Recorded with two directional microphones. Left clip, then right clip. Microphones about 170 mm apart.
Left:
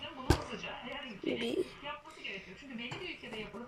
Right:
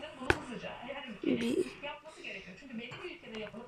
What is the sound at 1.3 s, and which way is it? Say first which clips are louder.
Speech: right 1 dB; centre (ahead or behind).